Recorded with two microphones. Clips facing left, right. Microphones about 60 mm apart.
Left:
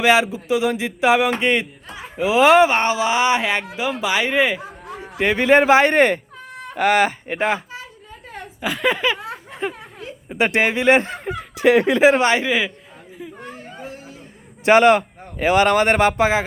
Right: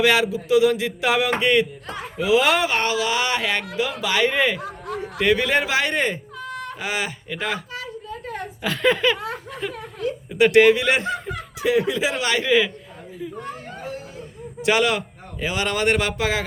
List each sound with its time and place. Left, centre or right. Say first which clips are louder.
0.0 s speech: left 2 dB; left
8.6 s speech: even; centre
9.2 s a sound: left 1 dB; left
10.2 s speech: right 5 dB; left
11.5 s speech: left 6 dB; left
12.2 s speech: left 5 dB; left
12.5 s speech: right 2 dB; centre
14.6 s a man's voice: left 7 dB; left